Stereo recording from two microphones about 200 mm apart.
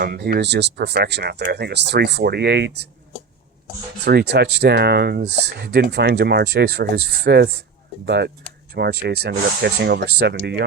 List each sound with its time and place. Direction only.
0.0 s speech: 50° right (ahead or behind)
4.0 s speech: 55° right (ahead or behind)